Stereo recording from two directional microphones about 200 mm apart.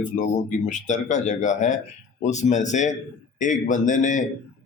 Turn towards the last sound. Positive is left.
turn(degrees=40)  # may be behind; listen again after turning